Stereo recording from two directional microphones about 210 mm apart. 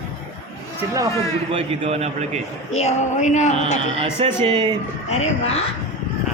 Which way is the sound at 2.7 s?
30° left (ahead or behind).